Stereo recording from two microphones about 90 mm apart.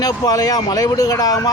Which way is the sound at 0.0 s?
45° left (ahead or behind).